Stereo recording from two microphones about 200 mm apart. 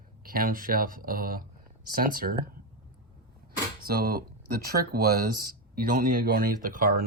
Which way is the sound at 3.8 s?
45° right (ahead or behind).